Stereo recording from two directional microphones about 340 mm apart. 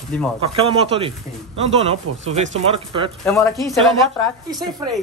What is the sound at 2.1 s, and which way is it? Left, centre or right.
Speech, right.